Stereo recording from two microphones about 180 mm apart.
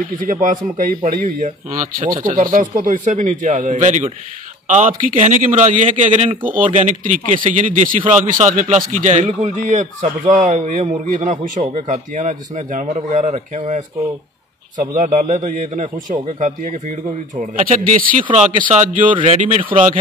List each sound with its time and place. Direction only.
0.2 s a man's voice: 50° right (ahead or behind)